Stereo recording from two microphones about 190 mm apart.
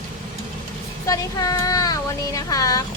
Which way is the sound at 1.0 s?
20° left (ahead or behind).